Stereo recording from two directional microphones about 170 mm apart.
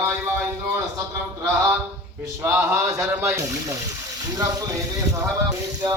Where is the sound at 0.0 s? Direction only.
15° right (ahead or behind).